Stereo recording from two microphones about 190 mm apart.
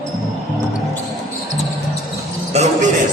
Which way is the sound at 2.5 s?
35° right (ahead or behind).